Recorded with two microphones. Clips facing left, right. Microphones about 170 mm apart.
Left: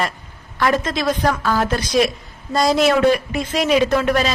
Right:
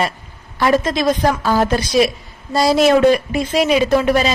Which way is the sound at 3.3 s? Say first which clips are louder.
Right 2 dB; 10° right (ahead or behind).